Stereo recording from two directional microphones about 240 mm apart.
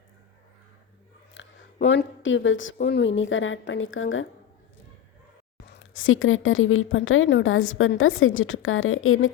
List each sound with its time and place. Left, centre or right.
1.4 s a sound: left
1.9 s a woman's voice: left
2.7 s a woman's voice: left
3.2 s a woman's voice: left
5.7 s a woman's voice: left